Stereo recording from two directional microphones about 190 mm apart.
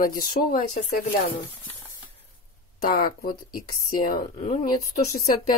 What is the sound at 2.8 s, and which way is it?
Speech, 50° left (ahead or behind).